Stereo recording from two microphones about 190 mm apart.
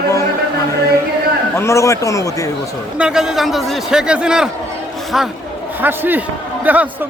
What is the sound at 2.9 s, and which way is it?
A man's voice, 5° right (ahead or behind).